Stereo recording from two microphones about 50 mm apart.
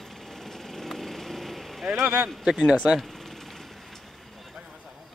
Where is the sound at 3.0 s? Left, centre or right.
Centre.